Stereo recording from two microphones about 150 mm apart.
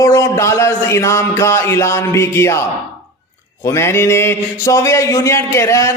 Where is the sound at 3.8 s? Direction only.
15° left (ahead or behind).